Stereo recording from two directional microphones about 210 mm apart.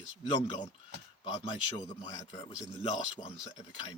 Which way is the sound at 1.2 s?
20° left (ahead or behind).